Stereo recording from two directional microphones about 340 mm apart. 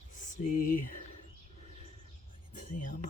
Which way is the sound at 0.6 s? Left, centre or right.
Left.